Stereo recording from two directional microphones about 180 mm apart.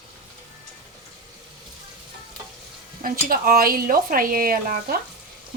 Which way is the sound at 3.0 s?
55° right (ahead or behind).